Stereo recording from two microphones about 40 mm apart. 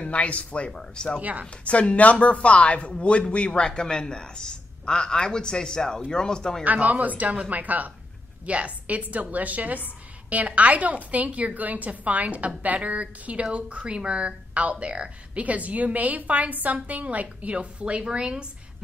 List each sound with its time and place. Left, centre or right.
0.0 s speech: left
0.7 s speech: centre
1.2 s speech: right
1.6 s speech: left; by 6.6 s centre
6.6 s speech: right
13.4 s a woman's voice: right